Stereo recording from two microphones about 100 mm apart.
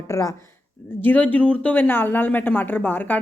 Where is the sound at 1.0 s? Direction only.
15° left (ahead or behind).